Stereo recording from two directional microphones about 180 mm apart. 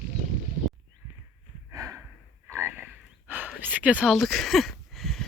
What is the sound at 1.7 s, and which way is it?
Snort, 15° right (ahead or behind).